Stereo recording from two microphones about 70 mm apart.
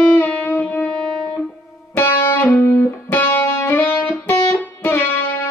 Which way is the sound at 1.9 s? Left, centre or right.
Left.